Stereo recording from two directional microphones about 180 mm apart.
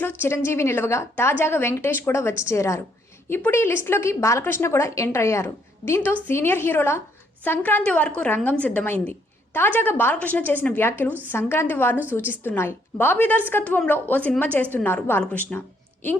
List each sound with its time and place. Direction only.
0.2 s a woman's voice: 15° left (ahead or behind)